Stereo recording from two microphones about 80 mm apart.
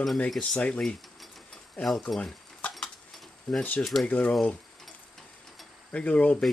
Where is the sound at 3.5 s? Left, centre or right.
Centre.